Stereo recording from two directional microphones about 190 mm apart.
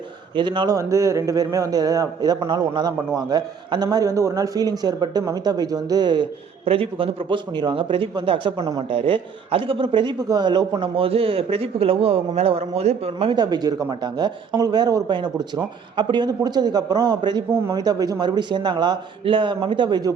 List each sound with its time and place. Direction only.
0.3 s a man's voice: 25° right (ahead or behind)